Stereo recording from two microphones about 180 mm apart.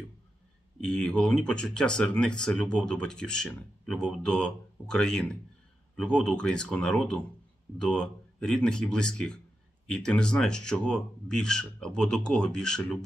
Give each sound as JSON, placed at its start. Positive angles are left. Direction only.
{"t": 0.8, "sound": "speech", "side_deg": 5}